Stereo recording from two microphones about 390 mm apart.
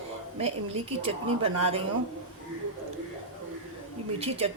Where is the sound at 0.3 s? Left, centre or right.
Centre.